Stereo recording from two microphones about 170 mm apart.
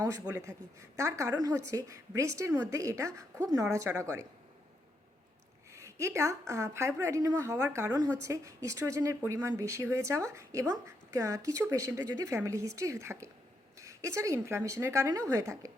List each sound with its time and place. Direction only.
0.0 s speech: 15° right (ahead or behind)
5.7 s speech: 15° right (ahead or behind)